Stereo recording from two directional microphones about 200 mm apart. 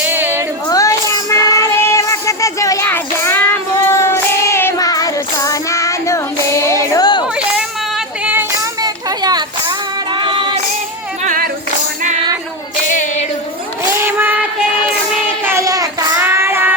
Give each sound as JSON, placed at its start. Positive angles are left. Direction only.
{"t": 0.0, "sound": "female singing", "side_deg": -10}
{"t": 0.7, "sound": "child singing", "side_deg": 15}
{"t": 7.3, "sound": "a sound", "side_deg": -5}
{"t": 8.8, "sound": "child singing", "side_deg": -20}
{"t": 11.2, "sound": "music", "side_deg": -45}
{"t": 14.0, "sound": "a sound", "side_deg": -10}
{"t": 15.1, "sound": "child singing", "side_deg": -10}